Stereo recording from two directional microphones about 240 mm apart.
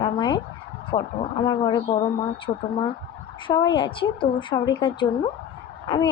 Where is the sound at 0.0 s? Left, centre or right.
Centre.